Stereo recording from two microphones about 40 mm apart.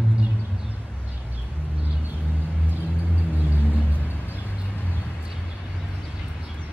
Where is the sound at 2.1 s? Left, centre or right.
Right.